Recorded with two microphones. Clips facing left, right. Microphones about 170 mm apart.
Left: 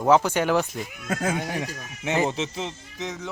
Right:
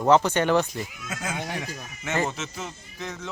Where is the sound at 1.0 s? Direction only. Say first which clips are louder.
Left 11 dB; 55° left (ahead or behind).